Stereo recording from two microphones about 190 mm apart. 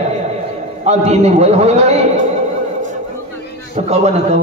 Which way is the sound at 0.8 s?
35° right (ahead or behind).